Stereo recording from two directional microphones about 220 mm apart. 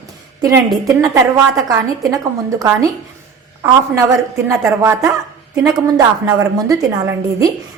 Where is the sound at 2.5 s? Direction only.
15° right (ahead or behind).